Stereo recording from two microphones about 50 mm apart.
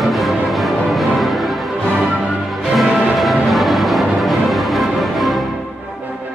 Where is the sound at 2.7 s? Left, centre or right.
Centre.